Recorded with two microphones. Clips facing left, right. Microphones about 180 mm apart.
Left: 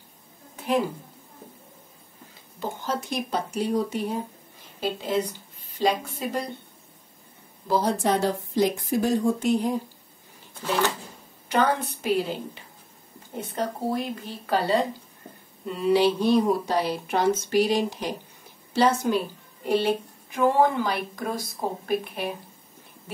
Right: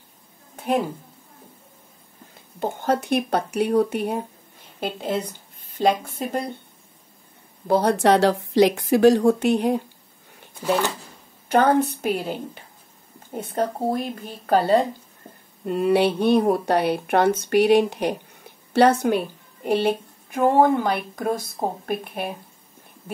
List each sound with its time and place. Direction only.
2.6 s a woman's voice: 60° right (ahead or behind)
7.6 s a woman's voice: 65° right (ahead or behind)
11.4 s a woman's voice: 50° right (ahead or behind)